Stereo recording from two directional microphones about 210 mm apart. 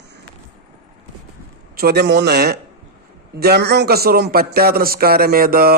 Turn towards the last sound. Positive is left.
turn(degrees=-45)  # may be behind; listen again after turning